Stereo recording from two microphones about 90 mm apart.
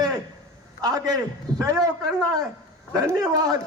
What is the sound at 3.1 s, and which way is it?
Speech, 45° right (ahead or behind).